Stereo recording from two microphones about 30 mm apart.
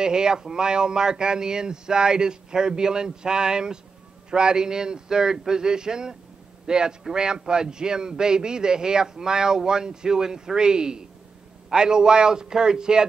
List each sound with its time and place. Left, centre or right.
0.0 s a man's voice: right